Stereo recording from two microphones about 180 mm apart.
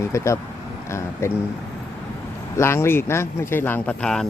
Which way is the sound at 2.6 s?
15° left (ahead or behind).